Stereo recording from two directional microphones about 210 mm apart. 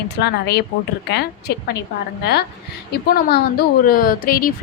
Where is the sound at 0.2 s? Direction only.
50° left (ahead or behind).